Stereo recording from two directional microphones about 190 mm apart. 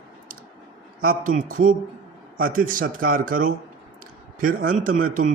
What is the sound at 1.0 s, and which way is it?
A man's voice, 45° right (ahead or behind).